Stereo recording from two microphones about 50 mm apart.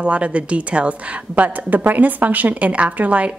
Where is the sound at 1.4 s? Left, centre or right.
Right.